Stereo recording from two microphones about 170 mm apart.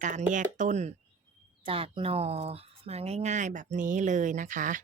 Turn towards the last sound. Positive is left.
turn(degrees=-50)  # may be behind; listen again after turning